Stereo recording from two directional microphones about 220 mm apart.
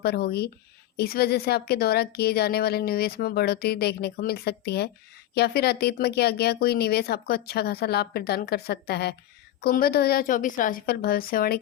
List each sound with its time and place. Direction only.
0.0 s a woman's voice: 45° left (ahead or behind)